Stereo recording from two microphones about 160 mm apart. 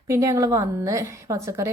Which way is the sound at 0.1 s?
20° right (ahead or behind).